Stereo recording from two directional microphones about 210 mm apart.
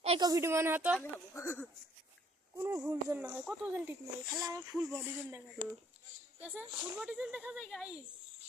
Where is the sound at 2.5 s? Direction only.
10° right (ahead or behind).